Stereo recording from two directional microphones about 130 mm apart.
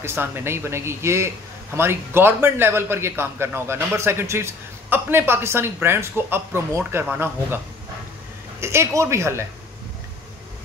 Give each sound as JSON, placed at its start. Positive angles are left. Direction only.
{"t": 0.0, "sound": "a man's voice", "side_deg": -15}
{"t": 8.5, "sound": "speech", "side_deg": -20}